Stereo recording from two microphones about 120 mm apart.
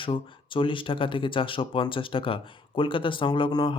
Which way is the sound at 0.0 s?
45° left (ahead or behind).